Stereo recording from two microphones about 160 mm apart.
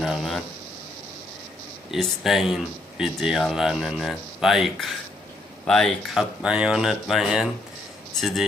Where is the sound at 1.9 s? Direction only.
Centre (ahead or behind).